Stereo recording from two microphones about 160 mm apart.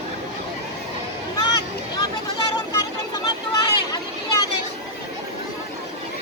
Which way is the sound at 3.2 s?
25° left (ahead or behind).